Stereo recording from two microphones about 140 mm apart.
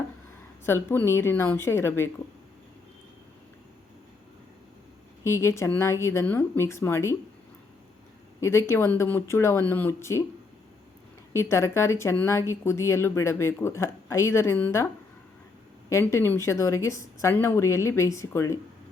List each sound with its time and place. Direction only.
0.6 s a woman's voice: 15° left (ahead or behind)
5.2 s speech: 20° left (ahead or behind)
8.4 s speech: 20° left (ahead or behind)
11.3 s speech: 20° left (ahead or behind)
16.1 s speech: 15° left (ahead or behind)